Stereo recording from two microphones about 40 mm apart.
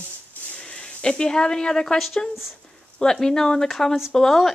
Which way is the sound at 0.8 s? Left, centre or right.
Centre.